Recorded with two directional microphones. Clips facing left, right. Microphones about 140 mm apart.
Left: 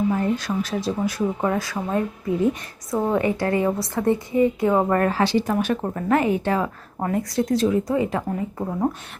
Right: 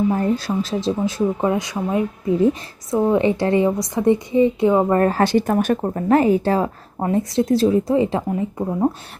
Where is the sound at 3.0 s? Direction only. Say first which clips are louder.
Right 4 dB; 20° right (ahead or behind).